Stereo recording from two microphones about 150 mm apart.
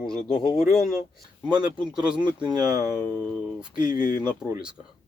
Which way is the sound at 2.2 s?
25° right (ahead or behind).